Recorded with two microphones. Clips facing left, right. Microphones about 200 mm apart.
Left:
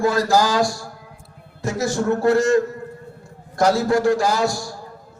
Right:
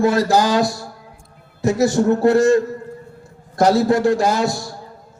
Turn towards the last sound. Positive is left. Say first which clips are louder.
# right 2 dB
turn(degrees=-20)  # may be behind; listen again after turning